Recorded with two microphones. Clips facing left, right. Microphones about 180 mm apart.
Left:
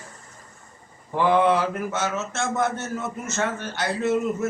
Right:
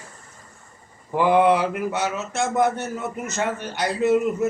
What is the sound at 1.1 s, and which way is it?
Speech, 10° right (ahead or behind).